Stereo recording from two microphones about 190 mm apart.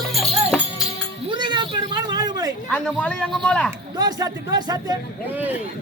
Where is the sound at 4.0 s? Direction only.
20° right (ahead or behind).